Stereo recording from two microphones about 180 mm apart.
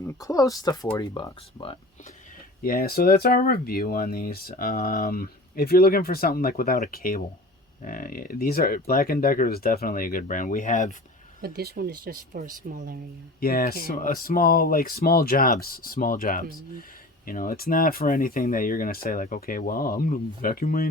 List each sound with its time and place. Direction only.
0.0 s speech: 20° left (ahead or behind)
2.6 s speech: 60° left (ahead or behind)
11.4 s speech: 60° right (ahead or behind)
13.4 s speech: 55° left (ahead or behind)